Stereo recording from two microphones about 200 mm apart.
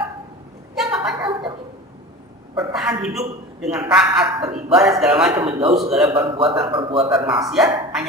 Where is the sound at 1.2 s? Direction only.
25° right (ahead or behind).